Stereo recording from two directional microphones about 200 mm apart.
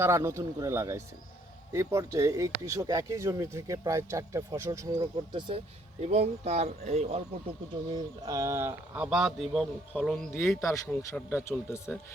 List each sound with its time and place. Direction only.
0.0 s speech: 15° right (ahead or behind); by 7.2 s 35° right (ahead or behind)
8.2 s speech: 15° right (ahead or behind); by 11.9 s 10° left (ahead or behind)